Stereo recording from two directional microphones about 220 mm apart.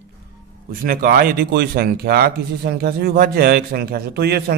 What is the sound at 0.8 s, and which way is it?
Speech, 40° right (ahead or behind).